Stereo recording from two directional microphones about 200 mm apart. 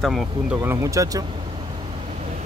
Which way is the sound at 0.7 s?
15° right (ahead or behind).